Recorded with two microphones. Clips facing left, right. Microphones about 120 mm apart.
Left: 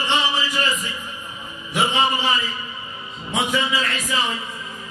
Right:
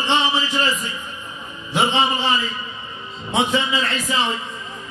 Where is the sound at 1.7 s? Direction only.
30° right (ahead or behind).